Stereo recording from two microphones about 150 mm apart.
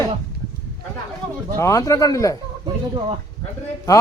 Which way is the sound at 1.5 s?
20° left (ahead or behind).